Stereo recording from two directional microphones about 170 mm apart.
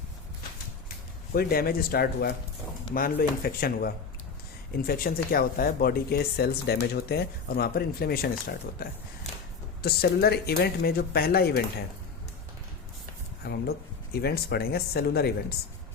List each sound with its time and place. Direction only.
1.3 s speech: 60° left (ahead or behind)
13.4 s speech: 70° left (ahead or behind)